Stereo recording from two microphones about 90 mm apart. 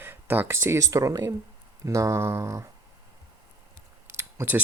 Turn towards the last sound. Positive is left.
turn(degrees=-25)  # may be behind; listen again after turning